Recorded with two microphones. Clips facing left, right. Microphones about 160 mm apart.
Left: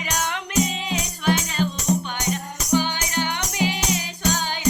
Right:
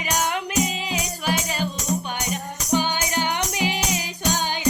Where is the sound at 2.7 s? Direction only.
15° right (ahead or behind).